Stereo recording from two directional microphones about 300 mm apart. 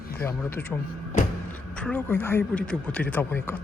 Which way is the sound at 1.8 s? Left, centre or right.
Centre.